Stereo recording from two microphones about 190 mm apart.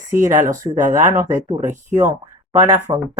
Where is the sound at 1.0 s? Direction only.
15° right (ahead or behind).